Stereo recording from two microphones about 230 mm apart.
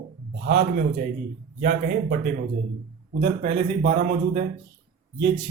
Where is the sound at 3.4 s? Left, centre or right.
Right.